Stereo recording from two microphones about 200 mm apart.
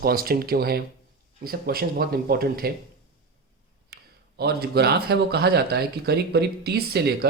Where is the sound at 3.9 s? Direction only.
55° right (ahead or behind).